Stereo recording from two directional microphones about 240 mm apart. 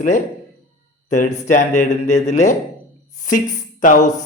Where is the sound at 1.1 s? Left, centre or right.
Left.